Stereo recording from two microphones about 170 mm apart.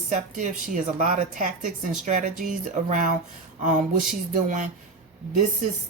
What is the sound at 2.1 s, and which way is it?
Speech, 50° right (ahead or behind).